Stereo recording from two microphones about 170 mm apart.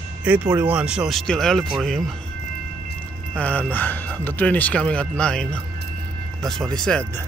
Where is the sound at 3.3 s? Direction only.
10° left (ahead or behind).